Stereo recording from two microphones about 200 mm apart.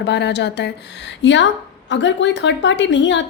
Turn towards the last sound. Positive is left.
turn(degrees=65)  # may be behind; listen again after turning